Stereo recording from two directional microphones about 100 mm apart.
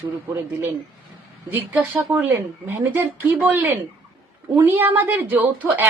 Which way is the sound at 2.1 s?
20° right (ahead or behind).